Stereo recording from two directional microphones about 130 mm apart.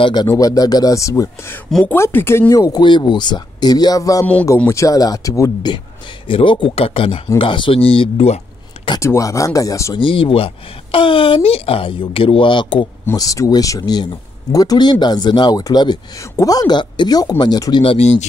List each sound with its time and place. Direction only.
0.0 s speech: 35° left (ahead or behind)
6.2 s speech: 40° left (ahead or behind)
9.0 s speech: 25° left (ahead or behind)
9.9 s speech: 40° left (ahead or behind)
13.1 s speech: 25° left (ahead or behind); by 18.2 s 55° left (ahead or behind)